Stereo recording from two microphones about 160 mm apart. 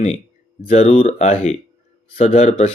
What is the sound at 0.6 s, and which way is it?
Speech, 40° left (ahead or behind).